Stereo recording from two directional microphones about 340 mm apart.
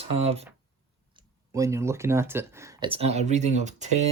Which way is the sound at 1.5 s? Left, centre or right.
Centre.